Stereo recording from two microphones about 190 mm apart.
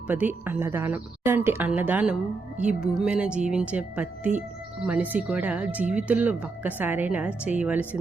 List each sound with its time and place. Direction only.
0.1 s speech: 10° right (ahead or behind)